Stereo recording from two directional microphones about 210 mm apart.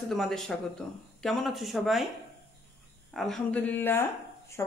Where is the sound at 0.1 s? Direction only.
Centre (ahead or behind).